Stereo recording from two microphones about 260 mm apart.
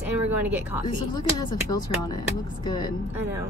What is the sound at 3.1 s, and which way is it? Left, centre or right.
Speech, centre.